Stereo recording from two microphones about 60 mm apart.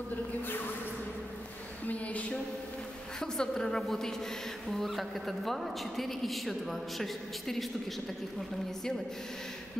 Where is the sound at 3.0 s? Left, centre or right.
Centre.